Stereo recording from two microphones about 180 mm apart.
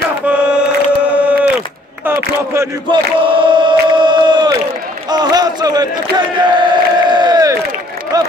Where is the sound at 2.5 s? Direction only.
15° right (ahead or behind).